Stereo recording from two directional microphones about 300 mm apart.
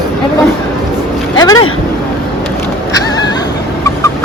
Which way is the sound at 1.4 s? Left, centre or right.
Centre.